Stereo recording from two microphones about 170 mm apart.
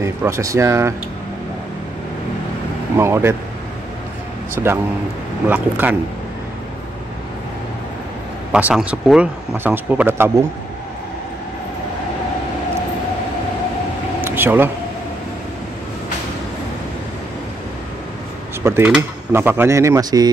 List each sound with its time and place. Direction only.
0.0 s mechanisms: 15° right (ahead or behind)
3.0 s mechanisms: 15° right (ahead or behind)
5.5 s mechanisms: 10° right (ahead or behind)
8.5 s mechanisms: 5° right (ahead or behind)
14.2 s a sound: 10° right (ahead or behind)
18.6 s speech: 15° right (ahead or behind)
18.9 s mechanisms: 10° right (ahead or behind)